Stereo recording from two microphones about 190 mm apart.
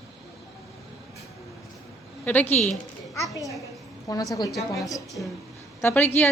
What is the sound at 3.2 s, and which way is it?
A woman's voice, 15° left (ahead or behind).